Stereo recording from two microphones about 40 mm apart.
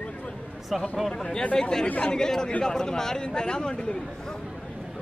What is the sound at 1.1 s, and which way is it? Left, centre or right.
A man's voice, left.